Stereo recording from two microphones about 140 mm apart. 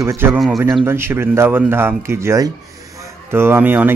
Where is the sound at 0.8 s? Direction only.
15° right (ahead or behind).